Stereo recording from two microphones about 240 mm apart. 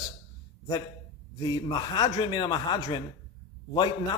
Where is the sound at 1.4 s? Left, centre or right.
Centre.